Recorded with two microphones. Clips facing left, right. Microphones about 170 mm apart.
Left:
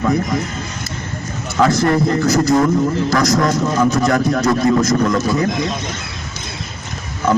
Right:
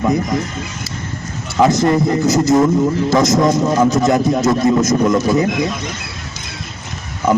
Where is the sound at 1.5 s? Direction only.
20° right (ahead or behind).